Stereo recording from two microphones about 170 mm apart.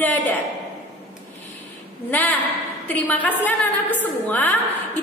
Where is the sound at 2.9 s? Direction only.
10° left (ahead or behind).